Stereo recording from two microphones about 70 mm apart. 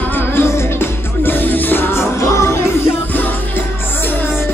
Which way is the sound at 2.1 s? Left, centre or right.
Left.